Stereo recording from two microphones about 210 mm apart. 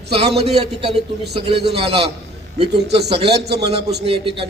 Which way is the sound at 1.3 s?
50° right (ahead or behind).